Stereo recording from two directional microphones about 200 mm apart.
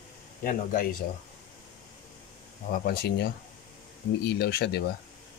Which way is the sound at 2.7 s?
50° left (ahead or behind).